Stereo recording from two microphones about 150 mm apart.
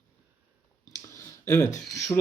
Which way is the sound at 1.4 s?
20° left (ahead or behind).